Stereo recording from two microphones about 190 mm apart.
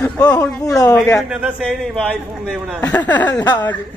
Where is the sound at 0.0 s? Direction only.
15° left (ahead or behind).